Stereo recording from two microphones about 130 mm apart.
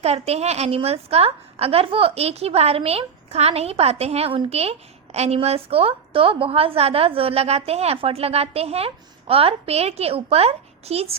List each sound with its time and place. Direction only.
0.0 s a woman's voice: 55° right (ahead or behind)